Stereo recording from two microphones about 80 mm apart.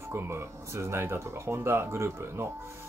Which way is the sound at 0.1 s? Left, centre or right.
Right.